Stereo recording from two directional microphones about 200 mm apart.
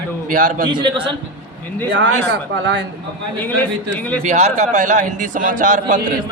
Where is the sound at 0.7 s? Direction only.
25° right (ahead or behind).